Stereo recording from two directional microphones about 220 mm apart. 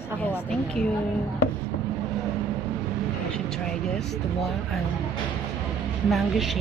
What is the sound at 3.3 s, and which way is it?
Vehicle, 5° left (ahead or behind).